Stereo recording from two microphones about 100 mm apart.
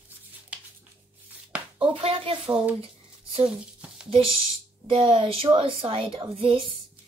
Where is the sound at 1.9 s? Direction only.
60° right (ahead or behind).